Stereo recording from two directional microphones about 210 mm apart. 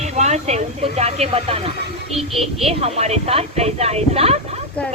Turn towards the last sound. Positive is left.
turn(degrees=-30)  # may be behind; listen again after turning